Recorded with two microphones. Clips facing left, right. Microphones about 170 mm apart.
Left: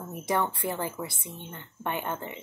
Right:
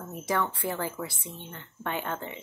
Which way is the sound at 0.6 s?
15° left (ahead or behind).